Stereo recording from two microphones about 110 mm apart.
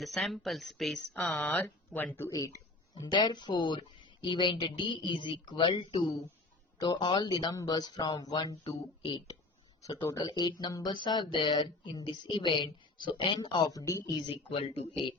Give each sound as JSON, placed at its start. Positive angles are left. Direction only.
{"t": 0.0, "sound": "speech", "side_deg": 0}
{"t": 1.2, "sound": "speech", "side_deg": 15}
{"t": 2.9, "sound": "speech", "side_deg": 40}
{"t": 10.1, "sound": "speech", "side_deg": 35}